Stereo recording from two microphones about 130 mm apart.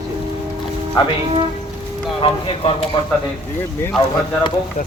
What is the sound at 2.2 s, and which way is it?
Speech, 45° left (ahead or behind).